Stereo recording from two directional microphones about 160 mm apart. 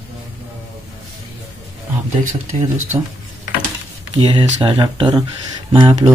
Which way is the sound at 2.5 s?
40° right (ahead or behind).